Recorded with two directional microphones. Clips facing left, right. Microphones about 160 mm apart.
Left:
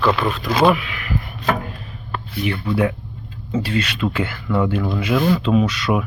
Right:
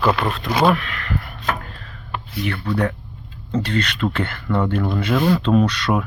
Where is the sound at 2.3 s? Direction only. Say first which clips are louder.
Left 2 dB; 15° left (ahead or behind).